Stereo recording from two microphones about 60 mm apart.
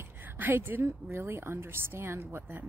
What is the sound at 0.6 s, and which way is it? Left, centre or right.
Speech, right.